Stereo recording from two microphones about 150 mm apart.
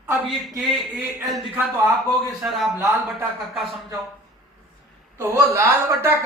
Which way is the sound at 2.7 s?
15° right (ahead or behind).